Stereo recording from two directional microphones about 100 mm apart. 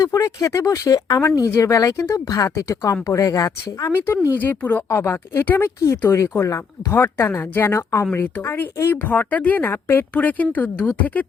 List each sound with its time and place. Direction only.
0.0 s speech: 30° left (ahead or behind)
4.4 s speech: 20° left (ahead or behind)
8.1 s a woman's voice: 20° left (ahead or behind)